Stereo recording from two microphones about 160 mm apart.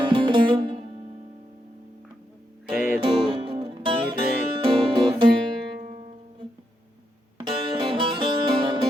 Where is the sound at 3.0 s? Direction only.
30° right (ahead or behind).